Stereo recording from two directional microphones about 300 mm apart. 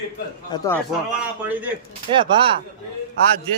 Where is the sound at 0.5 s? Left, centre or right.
Centre.